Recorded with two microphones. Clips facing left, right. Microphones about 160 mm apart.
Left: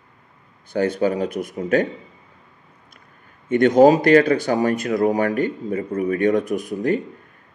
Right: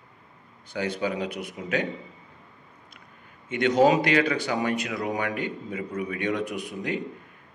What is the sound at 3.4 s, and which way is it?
Speech, 50° left (ahead or behind).